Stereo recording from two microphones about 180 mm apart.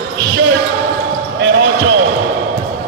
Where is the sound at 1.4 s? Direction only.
90° right.